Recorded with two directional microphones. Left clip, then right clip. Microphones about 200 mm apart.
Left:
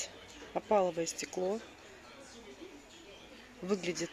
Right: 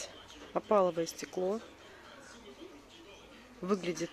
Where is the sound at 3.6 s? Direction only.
10° right (ahead or behind).